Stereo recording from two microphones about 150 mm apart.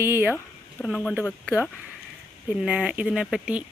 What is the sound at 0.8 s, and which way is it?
Speech, 10° left (ahead or behind).